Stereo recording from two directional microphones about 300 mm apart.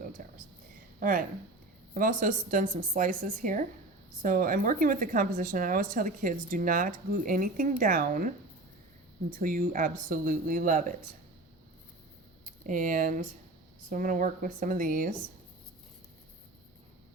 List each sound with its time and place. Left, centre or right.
0.2 s a sound: right
0.9 s a woman's voice: right
9.4 s a woman's voice: right
12.5 s a woman's voice: right